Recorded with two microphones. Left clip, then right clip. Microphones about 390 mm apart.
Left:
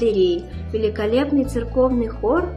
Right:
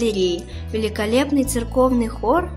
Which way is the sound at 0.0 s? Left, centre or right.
Right.